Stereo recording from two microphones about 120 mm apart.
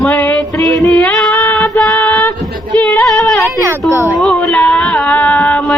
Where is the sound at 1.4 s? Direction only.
15° left (ahead or behind).